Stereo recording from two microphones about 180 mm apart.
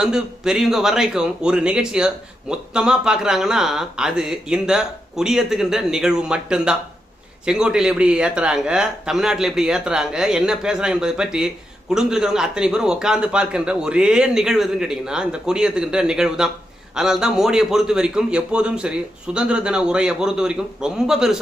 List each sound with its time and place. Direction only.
0.0 s a man's voice: 5° right (ahead or behind)